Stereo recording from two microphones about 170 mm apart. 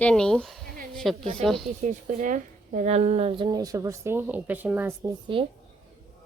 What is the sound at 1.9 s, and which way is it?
Speech, 50° right (ahead or behind).